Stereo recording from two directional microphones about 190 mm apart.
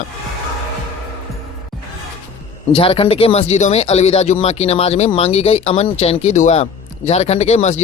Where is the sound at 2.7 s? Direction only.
30° left (ahead or behind).